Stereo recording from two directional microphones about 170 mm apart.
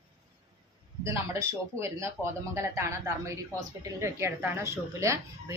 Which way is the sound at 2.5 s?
15° right (ahead or behind).